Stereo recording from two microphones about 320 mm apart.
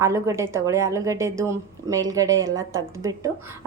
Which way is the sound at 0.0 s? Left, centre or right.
Centre.